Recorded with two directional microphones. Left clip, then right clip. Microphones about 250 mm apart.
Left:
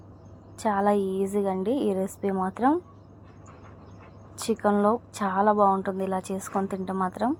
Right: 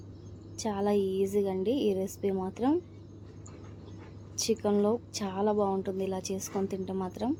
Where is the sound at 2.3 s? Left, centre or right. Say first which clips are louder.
Left 7 dB; centre.